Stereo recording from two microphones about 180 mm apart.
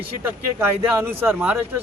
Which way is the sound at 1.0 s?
10° right (ahead or behind).